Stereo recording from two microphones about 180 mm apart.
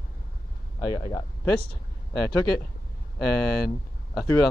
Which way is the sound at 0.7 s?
20° left (ahead or behind).